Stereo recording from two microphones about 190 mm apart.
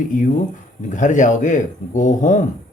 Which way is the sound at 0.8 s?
40° left (ahead or behind).